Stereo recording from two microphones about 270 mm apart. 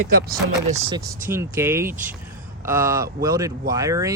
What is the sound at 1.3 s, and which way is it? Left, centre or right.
Speech, centre.